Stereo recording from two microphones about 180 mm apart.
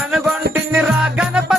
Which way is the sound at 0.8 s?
5° right (ahead or behind).